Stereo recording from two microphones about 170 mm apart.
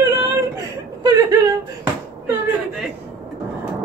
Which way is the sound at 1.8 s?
10° right (ahead or behind).